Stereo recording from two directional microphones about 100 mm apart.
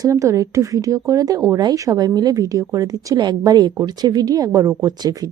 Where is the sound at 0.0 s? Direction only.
30° right (ahead or behind).